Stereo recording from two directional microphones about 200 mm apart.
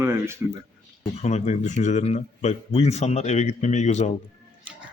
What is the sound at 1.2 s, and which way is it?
A man's voice, 35° left (ahead or behind).